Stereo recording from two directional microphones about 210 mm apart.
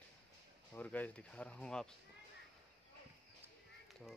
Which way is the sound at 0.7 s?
5° left (ahead or behind).